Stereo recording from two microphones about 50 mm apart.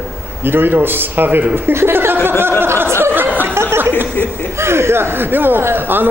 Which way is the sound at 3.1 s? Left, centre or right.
Right.